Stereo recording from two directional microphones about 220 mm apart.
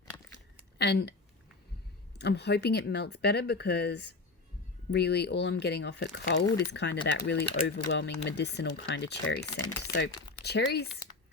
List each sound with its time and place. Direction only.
0.8 s speech: 50° left (ahead or behind)
2.2 s speech: 50° left (ahead or behind)